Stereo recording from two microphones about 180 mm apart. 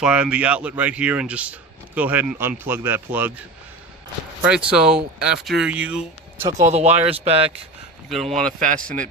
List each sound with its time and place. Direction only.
0.0 s speech: 5° right (ahead or behind)
4.4 s speech: 5° right (ahead or behind)
6.5 s speech: 40° right (ahead or behind)
8.1 s speech: centre (ahead or behind)